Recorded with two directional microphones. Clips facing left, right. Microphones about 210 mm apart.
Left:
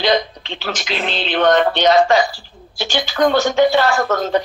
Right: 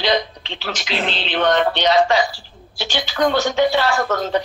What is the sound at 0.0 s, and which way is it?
A woman's voice, 50° left (ahead or behind).